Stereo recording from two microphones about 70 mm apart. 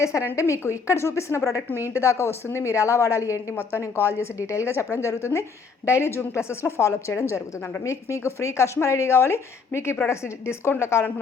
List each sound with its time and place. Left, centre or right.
0.0 s a woman's voice: left